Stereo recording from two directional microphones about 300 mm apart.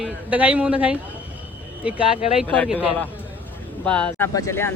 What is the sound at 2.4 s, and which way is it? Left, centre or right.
A man's voice, centre.